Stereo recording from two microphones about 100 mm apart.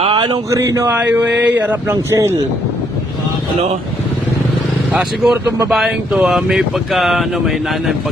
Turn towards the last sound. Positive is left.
turn(degrees=0)  # may be behind; listen again after turning